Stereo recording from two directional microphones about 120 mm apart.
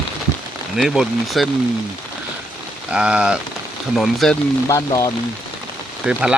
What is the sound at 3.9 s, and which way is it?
Speech, centre (ahead or behind).